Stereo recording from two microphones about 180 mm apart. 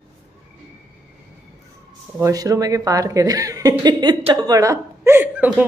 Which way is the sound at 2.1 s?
15° right (ahead or behind).